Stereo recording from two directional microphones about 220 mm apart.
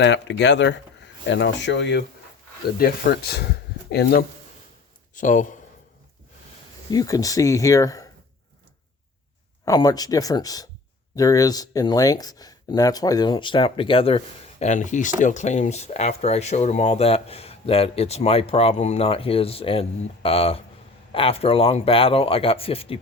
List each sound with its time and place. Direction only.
0.0 s speech: 55° left (ahead or behind)
5.1 s speech: 35° left (ahead or behind)
6.9 s speech: 15° left (ahead or behind)
9.6 s speech: 15° left (ahead or behind)